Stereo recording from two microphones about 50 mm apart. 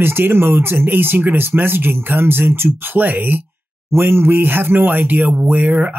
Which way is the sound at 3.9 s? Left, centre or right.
Right.